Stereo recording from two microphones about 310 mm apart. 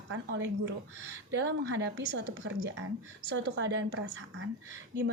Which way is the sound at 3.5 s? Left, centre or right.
Right.